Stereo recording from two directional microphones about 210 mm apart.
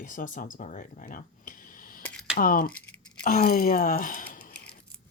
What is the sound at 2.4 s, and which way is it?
Speech, 40° left (ahead or behind).